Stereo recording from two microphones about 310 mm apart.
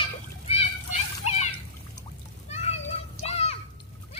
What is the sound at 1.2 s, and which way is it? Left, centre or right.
Splash, left.